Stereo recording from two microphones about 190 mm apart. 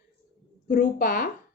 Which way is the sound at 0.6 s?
45° left (ahead or behind).